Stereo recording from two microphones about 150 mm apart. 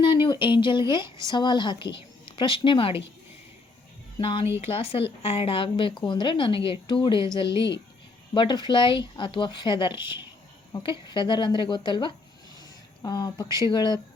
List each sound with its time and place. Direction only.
0.0 s a woman's voice: 30° left (ahead or behind)
4.2 s a woman's voice: 35° left (ahead or behind)
11.1 s a woman's voice: 30° left (ahead or behind)